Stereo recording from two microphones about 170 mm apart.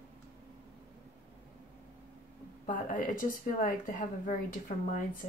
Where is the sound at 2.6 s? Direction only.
50° left (ahead or behind).